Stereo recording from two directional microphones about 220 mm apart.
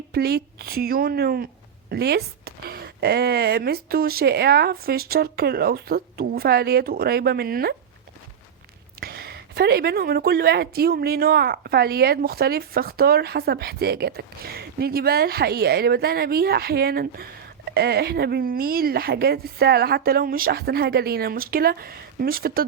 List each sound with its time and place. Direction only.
0.1 s speech: 45° right (ahead or behind)
9.0 s speech: 45° right (ahead or behind)